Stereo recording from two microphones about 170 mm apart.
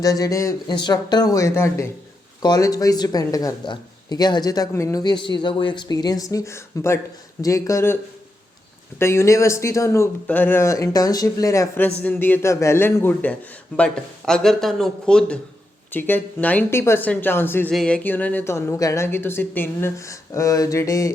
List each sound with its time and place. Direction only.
0.0 s speech: 20° left (ahead or behind)
9.0 s speech: 15° left (ahead or behind)